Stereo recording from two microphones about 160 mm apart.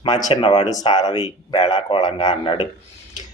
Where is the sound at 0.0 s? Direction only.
30° left (ahead or behind).